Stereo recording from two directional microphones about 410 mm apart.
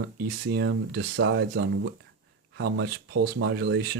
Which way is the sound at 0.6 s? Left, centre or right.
Right.